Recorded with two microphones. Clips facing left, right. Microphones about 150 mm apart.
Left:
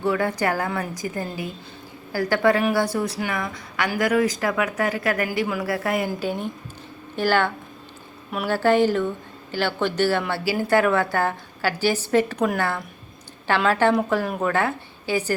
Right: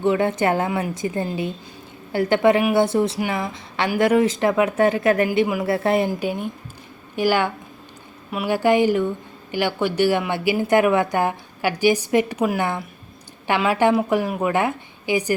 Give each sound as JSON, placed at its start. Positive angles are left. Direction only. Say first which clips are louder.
{"t": 0.0, "sound": "speech", "louder": "right 3 dB", "side_deg": -20}
{"t": 6.1, "sound": "a woman's voice", "louder": "right 2 dB", "side_deg": -15}